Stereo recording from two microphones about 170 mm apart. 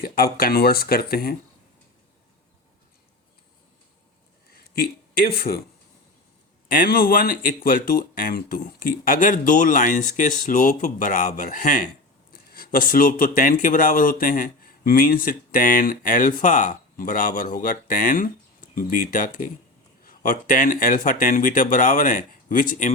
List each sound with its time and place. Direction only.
0.0 s speech: 60° left (ahead or behind)
4.5 s speech: 60° left (ahead or behind)
6.7 s speech: 60° left (ahead or behind)